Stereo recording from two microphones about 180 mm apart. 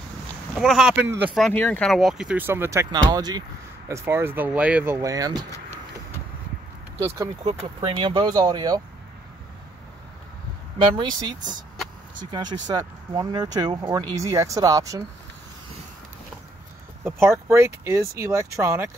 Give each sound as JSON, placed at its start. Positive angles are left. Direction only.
{"t": 0.6, "sound": "speech", "side_deg": 0}
{"t": 1.3, "sound": "speech", "side_deg": 5}
{"t": 7.8, "sound": "speech", "side_deg": -30}
{"t": 10.8, "sound": "speech", "side_deg": -25}
{"t": 17.0, "sound": "speech", "side_deg": -15}